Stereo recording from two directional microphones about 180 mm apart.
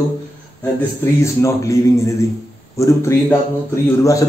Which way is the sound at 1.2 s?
15° left (ahead or behind).